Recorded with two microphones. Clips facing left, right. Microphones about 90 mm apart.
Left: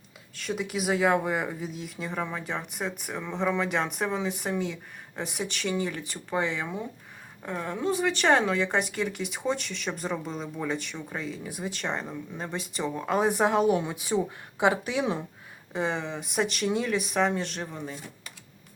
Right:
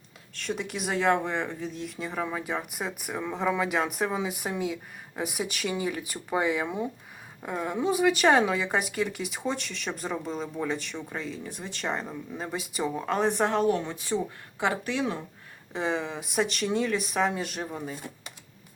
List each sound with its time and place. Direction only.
0.3 s speech: centre (ahead or behind)
13.1 s a woman's voice: 5° left (ahead or behind)
15.7 s speech: centre (ahead or behind)